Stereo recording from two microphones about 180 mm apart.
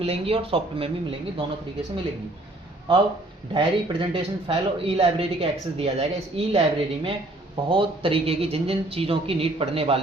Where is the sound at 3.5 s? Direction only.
30° right (ahead or behind).